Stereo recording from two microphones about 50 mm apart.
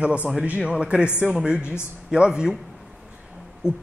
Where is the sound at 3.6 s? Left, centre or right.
Left.